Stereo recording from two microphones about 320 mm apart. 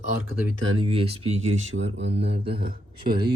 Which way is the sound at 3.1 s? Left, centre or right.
Centre.